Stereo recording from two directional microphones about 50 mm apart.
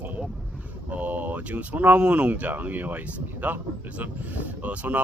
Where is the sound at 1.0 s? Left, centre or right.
Right.